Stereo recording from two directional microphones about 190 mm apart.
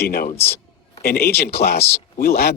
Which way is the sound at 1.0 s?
55° left (ahead or behind).